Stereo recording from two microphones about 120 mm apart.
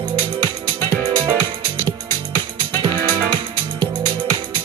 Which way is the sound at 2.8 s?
35° right (ahead or behind).